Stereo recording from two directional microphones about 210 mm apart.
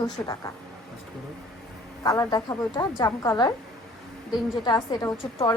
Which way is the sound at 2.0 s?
20° left (ahead or behind).